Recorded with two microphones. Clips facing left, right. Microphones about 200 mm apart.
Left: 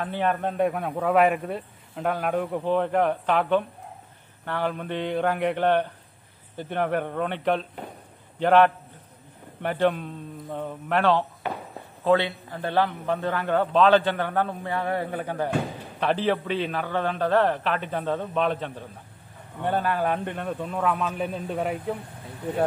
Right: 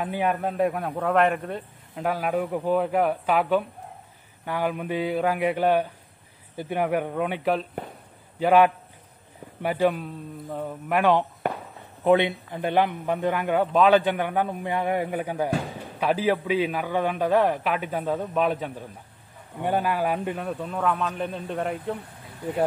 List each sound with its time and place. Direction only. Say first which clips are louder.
0.0 s a man's voice: even; 10° right (ahead or behind)
11.4 s walk: right 3 dB; 50° right (ahead or behind)
12.0 s a man's voice: right 2 dB; 20° right (ahead or behind); by 21.9 s centre (ahead or behind)